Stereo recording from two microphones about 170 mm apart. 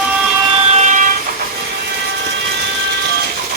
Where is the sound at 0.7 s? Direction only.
45° right (ahead or behind).